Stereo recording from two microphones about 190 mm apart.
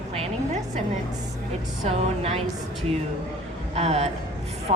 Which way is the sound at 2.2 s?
30° right (ahead or behind).